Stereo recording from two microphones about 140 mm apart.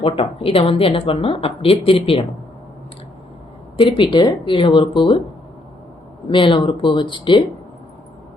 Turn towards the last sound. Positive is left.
turn(degrees=35)  # may be behind; listen again after turning